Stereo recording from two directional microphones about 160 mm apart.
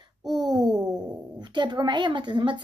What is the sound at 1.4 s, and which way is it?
Speech, 30° right (ahead or behind).